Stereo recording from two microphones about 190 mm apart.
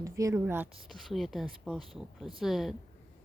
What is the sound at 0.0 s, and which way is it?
Speech, 15° right (ahead or behind).